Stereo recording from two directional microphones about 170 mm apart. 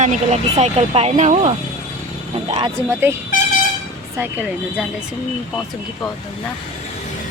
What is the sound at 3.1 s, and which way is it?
Speech, 10° right (ahead or behind).